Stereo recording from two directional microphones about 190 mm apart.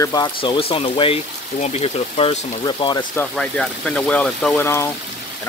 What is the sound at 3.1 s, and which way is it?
Speech, 5° left (ahead or behind).